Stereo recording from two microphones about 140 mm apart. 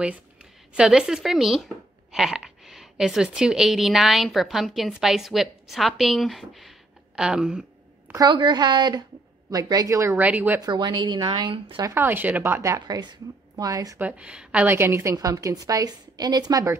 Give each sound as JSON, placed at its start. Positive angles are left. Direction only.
{"t": 0.0, "sound": "a woman's voice", "side_deg": -5}
{"t": 8.1, "sound": "a woman's voice", "side_deg": -30}
{"t": 10.6, "sound": "speech", "side_deg": -30}
{"t": 11.9, "sound": "a woman's voice", "side_deg": -15}
{"t": 13.9, "sound": "a woman's voice", "side_deg": -10}